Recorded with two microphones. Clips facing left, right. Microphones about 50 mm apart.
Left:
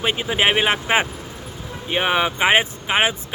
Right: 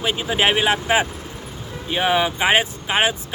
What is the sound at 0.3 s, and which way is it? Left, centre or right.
Speech, centre.